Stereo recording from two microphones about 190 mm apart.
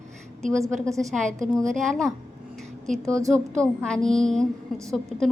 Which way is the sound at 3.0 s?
15° right (ahead or behind).